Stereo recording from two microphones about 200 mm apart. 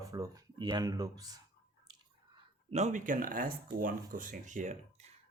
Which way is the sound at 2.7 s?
35° right (ahead or behind).